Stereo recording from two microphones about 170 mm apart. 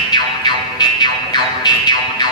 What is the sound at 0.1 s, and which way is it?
Music, 25° left (ahead or behind).